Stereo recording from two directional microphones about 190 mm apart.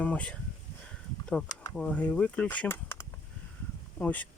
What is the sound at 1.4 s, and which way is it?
Speech, 20° left (ahead or behind).